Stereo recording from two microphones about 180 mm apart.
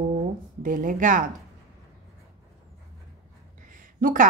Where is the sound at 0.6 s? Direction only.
50° right (ahead or behind).